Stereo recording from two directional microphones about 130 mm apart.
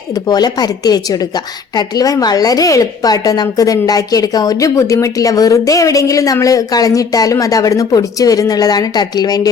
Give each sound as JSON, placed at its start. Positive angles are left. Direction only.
{"t": 0.3, "sound": "a woman's voice", "side_deg": 30}